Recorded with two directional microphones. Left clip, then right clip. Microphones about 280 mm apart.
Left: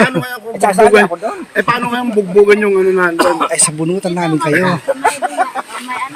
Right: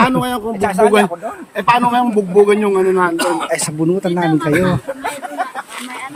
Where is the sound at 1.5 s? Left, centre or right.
Right.